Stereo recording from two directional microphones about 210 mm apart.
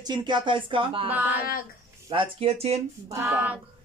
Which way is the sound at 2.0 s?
25° right (ahead or behind).